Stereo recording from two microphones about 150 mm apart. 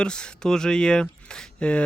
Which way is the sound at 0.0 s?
5° left (ahead or behind).